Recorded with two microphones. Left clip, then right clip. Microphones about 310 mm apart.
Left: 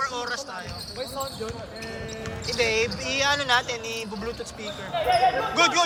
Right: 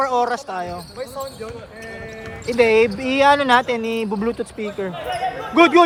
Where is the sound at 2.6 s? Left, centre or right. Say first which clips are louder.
Right 10 dB; right.